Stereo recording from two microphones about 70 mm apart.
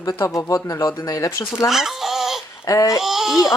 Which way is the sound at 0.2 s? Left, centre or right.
Left.